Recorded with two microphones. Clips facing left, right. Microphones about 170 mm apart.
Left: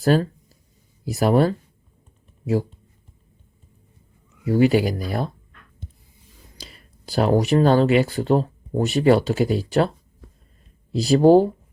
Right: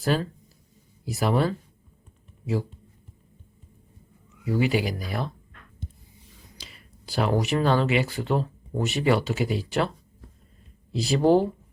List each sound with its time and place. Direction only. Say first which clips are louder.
0.0 s speech: left 7 dB; 40° left (ahead or behind)
4.4 s speech: left 7 dB; 45° left (ahead or behind)
6.6 s speech: left 7 dB; 40° left (ahead or behind)
10.9 s speech: left 6 dB; 40° left (ahead or behind)